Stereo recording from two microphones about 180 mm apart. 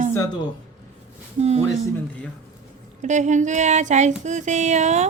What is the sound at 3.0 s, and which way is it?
Speech, 40° right (ahead or behind).